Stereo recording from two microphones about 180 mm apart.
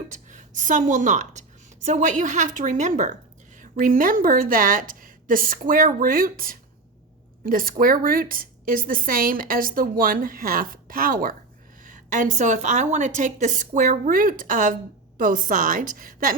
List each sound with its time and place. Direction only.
0.3 s a woman's voice: 45° right (ahead or behind)